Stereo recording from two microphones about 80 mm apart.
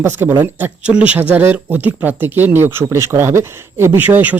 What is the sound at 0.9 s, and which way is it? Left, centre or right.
Speech, centre.